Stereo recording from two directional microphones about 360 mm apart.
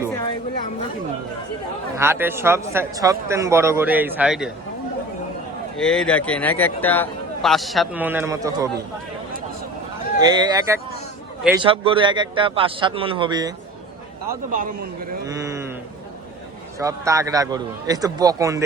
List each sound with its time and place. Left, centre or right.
2.0 s a man's voice: centre
5.7 s speech: centre
10.2 s a man's voice: centre
14.5 s a man's voice: right
15.3 s a sound: centre
16.7 s a man's voice: centre